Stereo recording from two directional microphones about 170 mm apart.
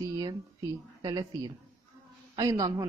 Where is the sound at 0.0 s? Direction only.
25° right (ahead or behind).